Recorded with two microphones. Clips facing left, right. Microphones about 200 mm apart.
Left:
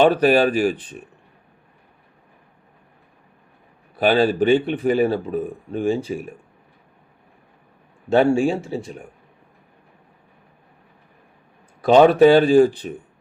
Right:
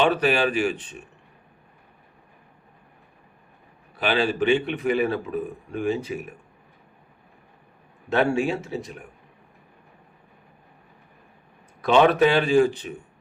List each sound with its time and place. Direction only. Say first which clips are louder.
0.0 s speech: left 6 dB; 40° left (ahead or behind)
3.9 s speech: left 6 dB; 40° left (ahead or behind)
8.1 s speech: left 5 dB; 30° left (ahead or behind)
11.9 s speech: left 6 dB; 40° left (ahead or behind)